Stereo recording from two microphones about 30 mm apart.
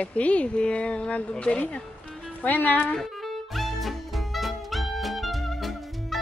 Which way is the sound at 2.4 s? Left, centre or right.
Left.